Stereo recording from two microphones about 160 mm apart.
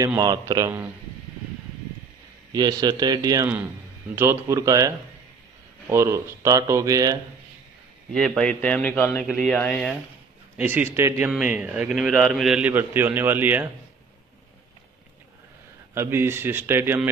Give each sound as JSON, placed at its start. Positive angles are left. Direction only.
{"t": 0.0, "sound": "speech", "side_deg": -25}
{"t": 2.5, "sound": "a man's voice", "side_deg": -25}
{"t": 8.1, "sound": "a man's voice", "side_deg": 5}
{"t": 10.6, "sound": "a man's voice", "side_deg": -10}
{"t": 15.9, "sound": "a man's voice", "side_deg": -15}